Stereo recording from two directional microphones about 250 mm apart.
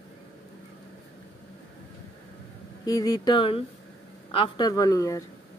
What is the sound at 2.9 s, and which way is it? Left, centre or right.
Speech, centre.